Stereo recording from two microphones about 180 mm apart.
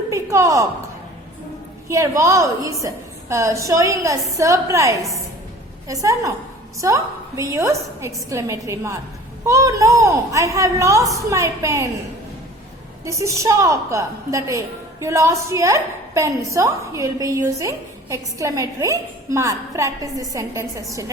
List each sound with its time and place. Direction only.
0.1 s a woman's voice: 15° right (ahead or behind)
1.9 s a woman's voice: 15° right (ahead or behind)
13.1 s a woman's voice: 15° right (ahead or behind)